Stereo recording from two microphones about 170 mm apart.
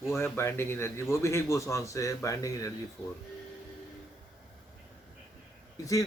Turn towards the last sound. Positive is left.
turn(degrees=20)  # may be behind; listen again after turning